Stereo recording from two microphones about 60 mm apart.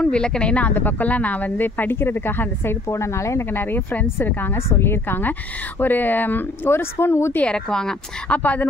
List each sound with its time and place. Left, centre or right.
0.0 s speech: centre
0.7 s speech: left
2.9 s speech: left
3.5 s speech: left
4.6 s speech: left
7.4 s speech: centre
8.3 s speech: left